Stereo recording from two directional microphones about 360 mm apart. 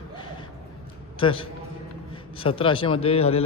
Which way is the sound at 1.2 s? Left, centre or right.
Centre.